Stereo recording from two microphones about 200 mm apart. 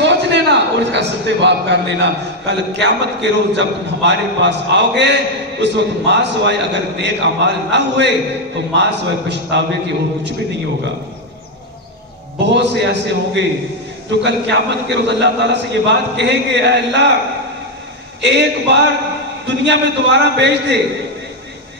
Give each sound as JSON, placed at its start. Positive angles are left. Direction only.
{"t": 0.0, "sound": "a man's voice", "side_deg": -60}
{"t": 12.4, "sound": "a man's voice", "side_deg": -60}
{"t": 18.2, "sound": "a man's voice", "side_deg": -60}